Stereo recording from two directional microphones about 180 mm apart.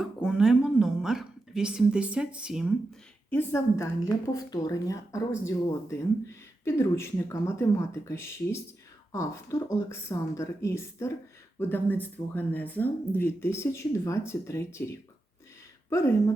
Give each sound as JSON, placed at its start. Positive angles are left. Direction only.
{"t": 0.0, "sound": "a woman's voice", "side_deg": 0}
{"t": 3.2, "sound": "a woman's voice", "side_deg": 10}